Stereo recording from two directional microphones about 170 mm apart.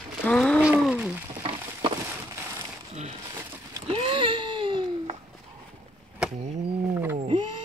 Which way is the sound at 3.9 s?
35° right (ahead or behind).